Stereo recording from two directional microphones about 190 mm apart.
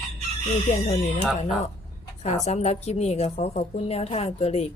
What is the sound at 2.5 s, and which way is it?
A woman's voice, 35° left (ahead or behind).